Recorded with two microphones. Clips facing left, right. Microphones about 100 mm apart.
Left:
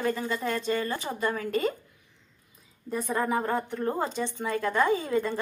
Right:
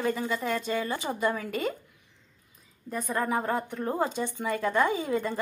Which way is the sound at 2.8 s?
Centre (ahead or behind).